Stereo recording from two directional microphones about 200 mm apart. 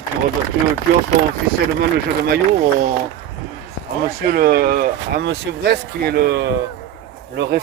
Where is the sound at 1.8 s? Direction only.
50° right (ahead or behind).